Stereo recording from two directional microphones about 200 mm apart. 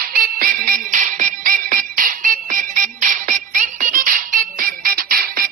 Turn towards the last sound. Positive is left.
turn(degrees=-50)  # may be behind; listen again after turning